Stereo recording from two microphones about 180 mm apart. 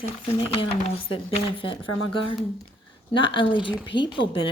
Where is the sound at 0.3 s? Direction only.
30° left (ahead or behind).